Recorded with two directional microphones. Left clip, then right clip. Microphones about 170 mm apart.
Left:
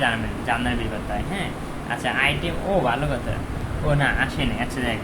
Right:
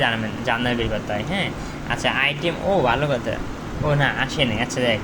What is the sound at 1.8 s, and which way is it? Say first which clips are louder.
Speech: right 1 dB; 45° right (ahead or behind).